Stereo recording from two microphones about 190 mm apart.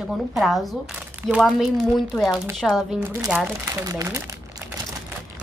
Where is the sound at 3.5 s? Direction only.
15° right (ahead or behind).